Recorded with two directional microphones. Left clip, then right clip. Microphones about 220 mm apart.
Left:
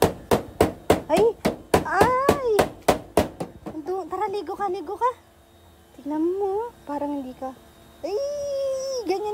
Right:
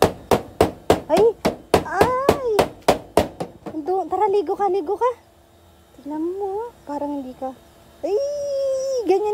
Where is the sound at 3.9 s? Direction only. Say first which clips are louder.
Right 8 dB; 40° right (ahead or behind).